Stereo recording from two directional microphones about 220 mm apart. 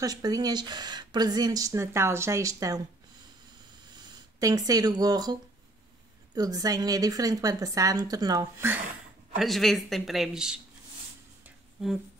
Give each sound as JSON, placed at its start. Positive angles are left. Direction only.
{"t": 0.0, "sound": "speech", "side_deg": -15}
{"t": 4.4, "sound": "speech", "side_deg": -15}
{"t": 9.4, "sound": "speech", "side_deg": 0}
{"t": 11.4, "sound": "a sound", "side_deg": 0}